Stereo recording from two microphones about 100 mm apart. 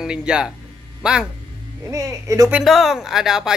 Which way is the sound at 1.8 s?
30° right (ahead or behind).